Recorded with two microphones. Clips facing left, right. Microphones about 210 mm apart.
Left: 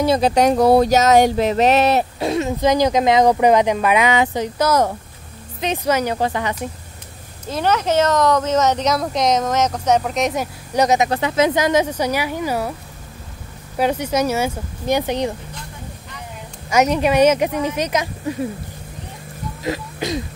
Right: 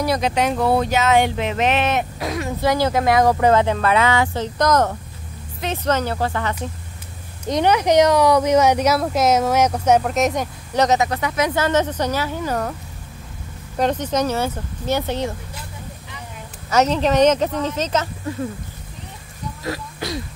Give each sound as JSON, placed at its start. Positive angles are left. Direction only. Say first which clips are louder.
{"t": 0.0, "sound": "speech", "louder": "left 4 dB", "side_deg": 25}
{"t": 0.3, "sound": "speech", "louder": "left 7 dB", "side_deg": 40}
{"t": 7.4, "sound": "speech", "louder": "right 2 dB", "side_deg": -15}
{"t": 11.1, "sound": "speech", "louder": "left 4 dB", "side_deg": 25}
{"t": 11.5, "sound": "speech", "louder": "left 2 dB", "side_deg": 10}
{"t": 13.7, "sound": "speech", "louder": "left 1 dB", "side_deg": 10}
{"t": 16.7, "sound": "speech", "louder": "left 1 dB", "side_deg": 10}
{"t": 19.6, "sound": "speech", "louder": "left 4 dB", "side_deg": 20}